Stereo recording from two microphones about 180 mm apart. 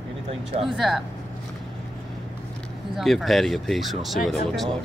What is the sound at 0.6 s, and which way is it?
Speech, centre (ahead or behind).